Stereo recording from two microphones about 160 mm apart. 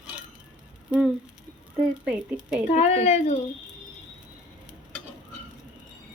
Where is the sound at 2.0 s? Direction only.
5° right (ahead or behind).